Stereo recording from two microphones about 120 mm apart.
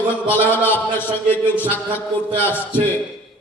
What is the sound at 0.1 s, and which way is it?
A man's voice, 15° left (ahead or behind).